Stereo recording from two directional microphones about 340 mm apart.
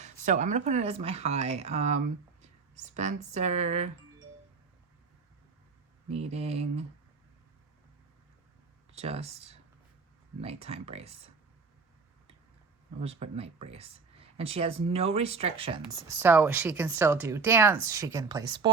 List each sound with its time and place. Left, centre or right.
0.0 s speech: right
6.1 s speech: centre
8.9 s speech: centre
13.0 s speech: centre